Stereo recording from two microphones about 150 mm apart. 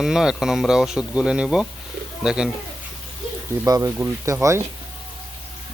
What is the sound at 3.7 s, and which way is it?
Speech, 20° right (ahead or behind).